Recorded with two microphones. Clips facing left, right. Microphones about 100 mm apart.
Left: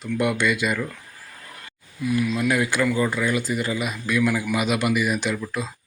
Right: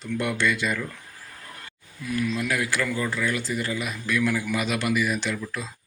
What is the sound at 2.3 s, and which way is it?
A man's voice, 25° left (ahead or behind).